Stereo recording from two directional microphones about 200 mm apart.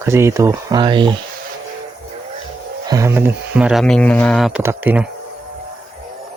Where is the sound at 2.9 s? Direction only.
15° right (ahead or behind); by 4.6 s centre (ahead or behind).